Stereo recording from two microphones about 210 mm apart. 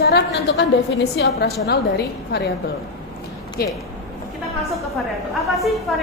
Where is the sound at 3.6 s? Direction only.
45° left (ahead or behind).